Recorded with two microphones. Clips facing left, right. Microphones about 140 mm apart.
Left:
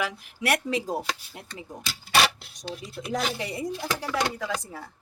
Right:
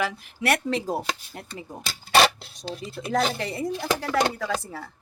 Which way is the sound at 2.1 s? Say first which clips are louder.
Right 4 dB; 35° right (ahead or behind).